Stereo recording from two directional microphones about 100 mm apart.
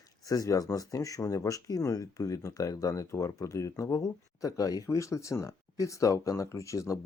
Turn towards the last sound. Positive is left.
turn(degrees=30)  # may be behind; listen again after turning